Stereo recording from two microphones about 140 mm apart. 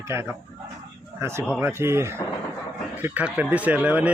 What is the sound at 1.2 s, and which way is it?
Speech, 20° right (ahead or behind).